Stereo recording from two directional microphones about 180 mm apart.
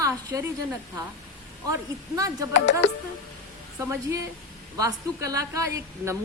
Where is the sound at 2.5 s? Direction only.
85° left.